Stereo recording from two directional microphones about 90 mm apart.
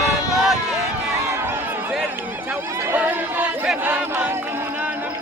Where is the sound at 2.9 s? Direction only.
15° right (ahead or behind).